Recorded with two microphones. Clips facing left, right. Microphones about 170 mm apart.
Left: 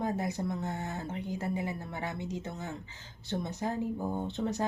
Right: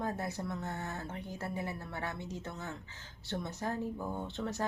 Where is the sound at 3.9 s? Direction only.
40° left (ahead or behind).